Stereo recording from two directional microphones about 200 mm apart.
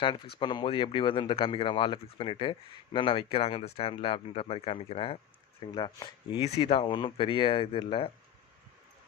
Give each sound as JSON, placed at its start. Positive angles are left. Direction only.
{"t": 0.3, "sound": "speech", "side_deg": 25}